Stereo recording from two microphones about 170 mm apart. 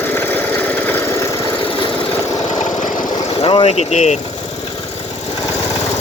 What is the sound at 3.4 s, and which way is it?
Speech, 30° left (ahead or behind).